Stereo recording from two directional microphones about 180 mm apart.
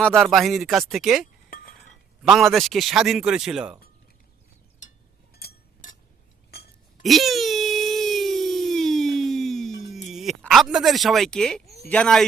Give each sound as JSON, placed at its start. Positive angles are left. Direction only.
{"t": 0.0, "sound": "a man's voice", "side_deg": 5}
{"t": 5.3, "sound": "a sound", "side_deg": 60}
{"t": 6.5, "sound": "chink", "side_deg": 60}
{"t": 7.0, "sound": "wail", "side_deg": 0}
{"t": 10.1, "sound": "a man's voice", "side_deg": 0}